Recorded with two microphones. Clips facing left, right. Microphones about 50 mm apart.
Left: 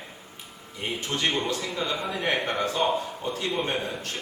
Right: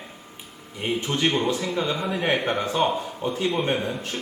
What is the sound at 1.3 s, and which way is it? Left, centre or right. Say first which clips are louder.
A man's voice: right 4 dB; centre.